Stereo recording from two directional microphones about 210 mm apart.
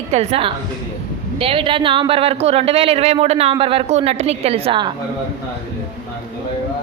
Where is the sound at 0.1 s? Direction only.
30° right (ahead or behind).